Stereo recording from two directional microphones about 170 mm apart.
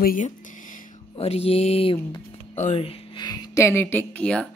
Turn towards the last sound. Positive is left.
turn(degrees=5)  # may be behind; listen again after turning